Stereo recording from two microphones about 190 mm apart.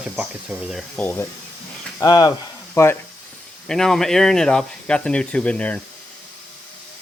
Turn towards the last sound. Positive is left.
turn(degrees=5)  # may be behind; listen again after turning